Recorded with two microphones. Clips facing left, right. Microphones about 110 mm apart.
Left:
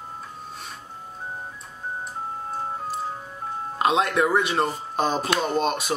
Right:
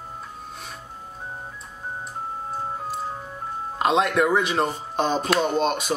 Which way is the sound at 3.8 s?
Centre (ahead or behind).